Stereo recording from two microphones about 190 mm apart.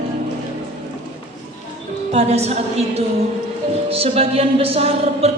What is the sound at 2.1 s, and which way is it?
Speech, 35° right (ahead or behind).